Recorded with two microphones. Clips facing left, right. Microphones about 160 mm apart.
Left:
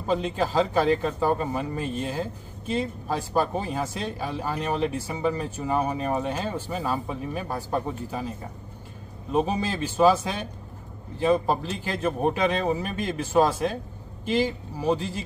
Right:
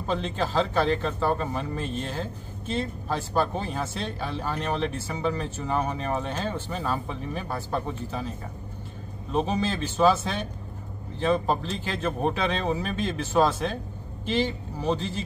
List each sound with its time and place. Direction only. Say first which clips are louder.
0.0 s speech: left 3 dB; 10° left (ahead or behind)
9.3 s speech: left 1 dB; 10° left (ahead or behind)